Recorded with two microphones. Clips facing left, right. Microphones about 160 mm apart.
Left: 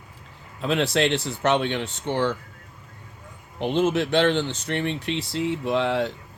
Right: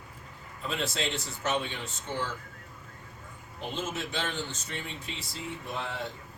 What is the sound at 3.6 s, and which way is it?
Speech, 70° left (ahead or behind).